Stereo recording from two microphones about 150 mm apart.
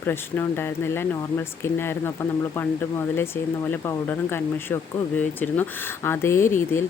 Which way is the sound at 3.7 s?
15° left (ahead or behind).